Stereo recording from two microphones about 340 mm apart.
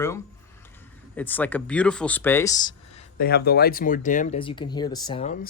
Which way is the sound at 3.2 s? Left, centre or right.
Left.